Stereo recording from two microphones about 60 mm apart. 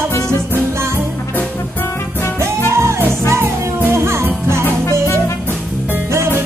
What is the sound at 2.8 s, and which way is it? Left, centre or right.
Music, right.